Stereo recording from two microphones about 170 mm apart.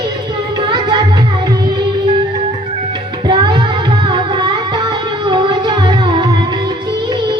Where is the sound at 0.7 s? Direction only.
25° right (ahead or behind).